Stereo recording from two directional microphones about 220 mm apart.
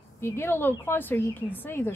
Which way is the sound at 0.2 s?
10° left (ahead or behind).